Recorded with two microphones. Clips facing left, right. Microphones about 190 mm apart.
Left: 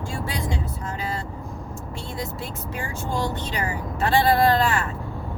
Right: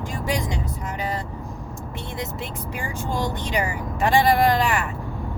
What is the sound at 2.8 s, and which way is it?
Speech, 15° right (ahead or behind).